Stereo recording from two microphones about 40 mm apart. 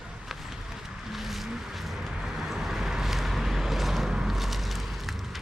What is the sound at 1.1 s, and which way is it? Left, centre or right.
Vehicle, centre.